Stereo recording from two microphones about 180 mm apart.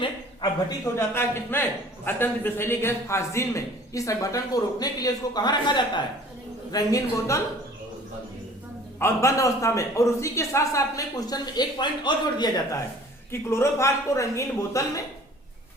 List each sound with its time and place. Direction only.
0.9 s a man's voice: 15° left (ahead or behind)
9.0 s a man's voice: 15° left (ahead or behind)